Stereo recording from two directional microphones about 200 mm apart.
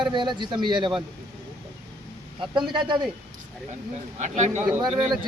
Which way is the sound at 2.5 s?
25° right (ahead or behind).